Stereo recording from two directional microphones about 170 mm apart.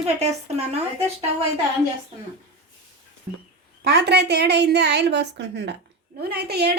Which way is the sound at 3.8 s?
75° right (ahead or behind).